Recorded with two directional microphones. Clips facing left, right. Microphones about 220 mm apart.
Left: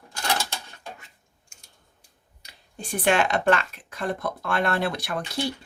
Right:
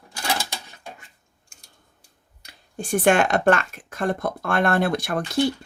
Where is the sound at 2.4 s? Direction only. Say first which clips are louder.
Right 6 dB; 50° right (ahead or behind).